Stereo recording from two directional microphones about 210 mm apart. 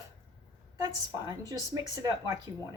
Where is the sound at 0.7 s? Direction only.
15° right (ahead or behind).